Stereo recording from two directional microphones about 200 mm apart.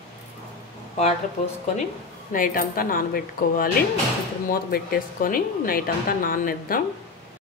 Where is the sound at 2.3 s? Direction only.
45° left (ahead or behind).